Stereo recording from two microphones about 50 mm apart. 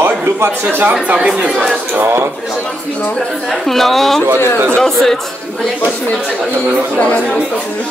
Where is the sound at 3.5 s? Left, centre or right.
Centre.